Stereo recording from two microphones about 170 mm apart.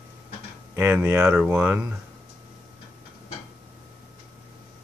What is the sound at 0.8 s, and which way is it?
Speech, 10° right (ahead or behind).